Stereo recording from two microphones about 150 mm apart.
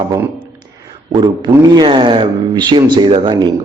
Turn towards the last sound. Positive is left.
turn(degrees=-30)  # may be behind; listen again after turning